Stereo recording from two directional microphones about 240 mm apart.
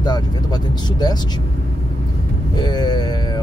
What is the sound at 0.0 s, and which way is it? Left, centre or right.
Vehicle, centre.